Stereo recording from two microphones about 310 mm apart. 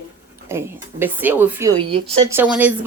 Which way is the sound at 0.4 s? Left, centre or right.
Centre.